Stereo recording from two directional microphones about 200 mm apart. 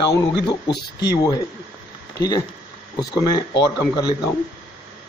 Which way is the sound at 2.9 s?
20° left (ahead or behind).